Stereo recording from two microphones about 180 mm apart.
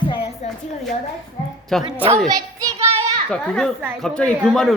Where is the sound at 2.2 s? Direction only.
20° right (ahead or behind).